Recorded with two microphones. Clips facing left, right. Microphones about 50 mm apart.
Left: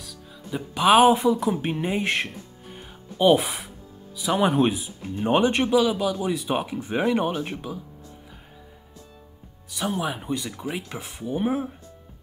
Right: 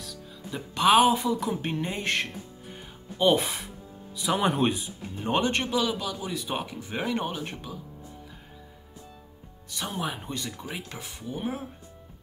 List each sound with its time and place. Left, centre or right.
0.0 s music: centre
0.7 s speech: centre
1.0 s speech: centre
1.3 s speech: centre
2.8 s music: centre
4.2 s speech: centre
9.7 s speech: centre; by 11.7 s left